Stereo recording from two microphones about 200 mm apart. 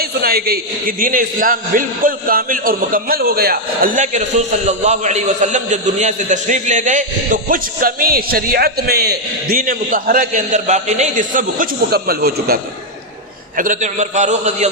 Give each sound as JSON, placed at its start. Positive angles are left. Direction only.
{"t": 0.0, "sound": "a man's voice", "side_deg": -50}
{"t": 13.6, "sound": "a man's voice", "side_deg": -40}